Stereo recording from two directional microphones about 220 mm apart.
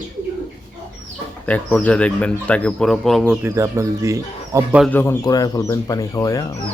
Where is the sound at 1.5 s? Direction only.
5° left (ahead or behind).